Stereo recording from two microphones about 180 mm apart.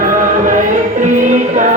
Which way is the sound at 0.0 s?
50° right (ahead or behind).